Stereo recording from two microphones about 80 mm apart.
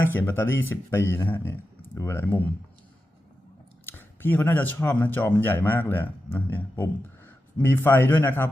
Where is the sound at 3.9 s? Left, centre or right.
Left.